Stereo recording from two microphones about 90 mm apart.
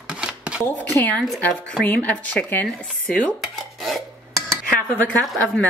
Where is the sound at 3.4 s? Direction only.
Centre (ahead or behind).